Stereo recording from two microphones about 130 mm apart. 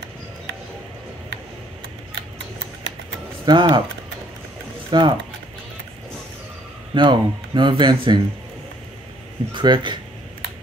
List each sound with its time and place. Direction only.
3.4 s speech: 35° right (ahead or behind)
4.9 s speech: 40° right (ahead or behind)
6.9 s speech: 35° right (ahead or behind)
9.5 s speech: 40° right (ahead or behind)